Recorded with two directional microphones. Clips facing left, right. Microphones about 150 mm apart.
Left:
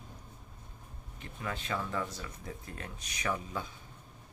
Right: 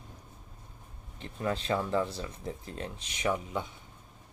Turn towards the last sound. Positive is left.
turn(degrees=-20)  # may be behind; listen again after turning